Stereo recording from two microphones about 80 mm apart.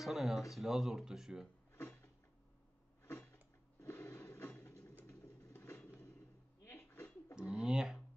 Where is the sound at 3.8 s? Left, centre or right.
Left.